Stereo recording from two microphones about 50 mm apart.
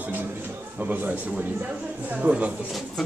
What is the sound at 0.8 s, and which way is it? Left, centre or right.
Speech, right.